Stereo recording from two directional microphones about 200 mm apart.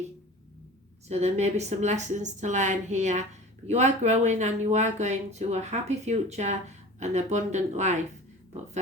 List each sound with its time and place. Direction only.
1.0 s speech: 35° right (ahead or behind)